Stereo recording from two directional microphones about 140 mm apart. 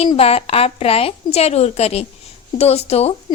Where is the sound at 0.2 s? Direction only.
45° left (ahead or behind).